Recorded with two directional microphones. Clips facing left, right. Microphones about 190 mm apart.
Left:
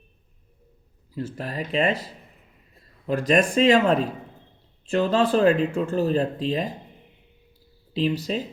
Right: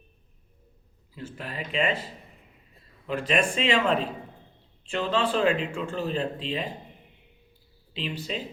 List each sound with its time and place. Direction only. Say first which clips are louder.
1.1 s speech: left 7 dB; 40° left (ahead or behind)
3.1 s speech: left 5 dB; 40° left (ahead or behind)
7.9 s speech: left 9 dB; 40° left (ahead or behind)